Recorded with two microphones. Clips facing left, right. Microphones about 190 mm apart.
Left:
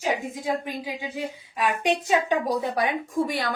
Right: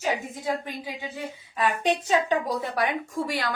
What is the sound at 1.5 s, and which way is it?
A woman's voice, 15° left (ahead or behind).